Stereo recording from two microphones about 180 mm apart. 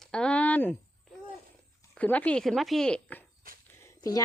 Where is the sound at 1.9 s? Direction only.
10° left (ahead or behind).